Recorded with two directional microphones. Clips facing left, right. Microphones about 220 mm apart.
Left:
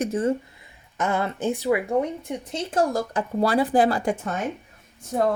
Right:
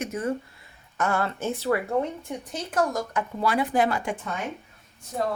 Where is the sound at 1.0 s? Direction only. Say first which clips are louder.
Left 2 dB; 20° left (ahead or behind); by 4.3 s 35° left (ahead or behind).